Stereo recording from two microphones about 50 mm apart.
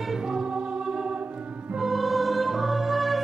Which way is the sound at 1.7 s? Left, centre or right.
Centre.